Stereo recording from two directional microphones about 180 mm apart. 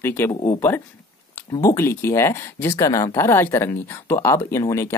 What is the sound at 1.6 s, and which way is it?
Speech, 15° left (ahead or behind).